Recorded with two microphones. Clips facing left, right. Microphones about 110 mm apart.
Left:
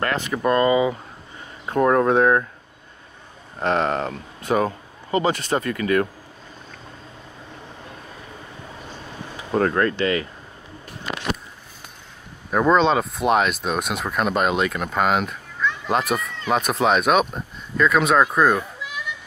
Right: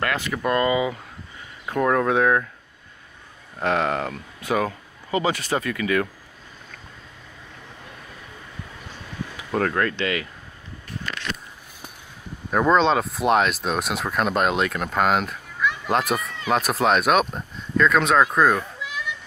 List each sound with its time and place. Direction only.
0.0 s speech: 30° left (ahead or behind)
3.5 s speech: 30° left (ahead or behind)
9.4 s speech: 30° left (ahead or behind)
12.4 s speech: centre (ahead or behind)
15.6 s children playing: 10° right (ahead or behind)
15.9 s speech: centre (ahead or behind)